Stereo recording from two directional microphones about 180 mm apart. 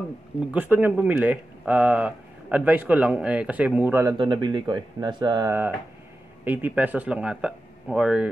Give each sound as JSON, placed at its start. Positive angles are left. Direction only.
{"t": 0.5, "sound": "speech", "side_deg": -10}
{"t": 4.2, "sound": "speech", "side_deg": -25}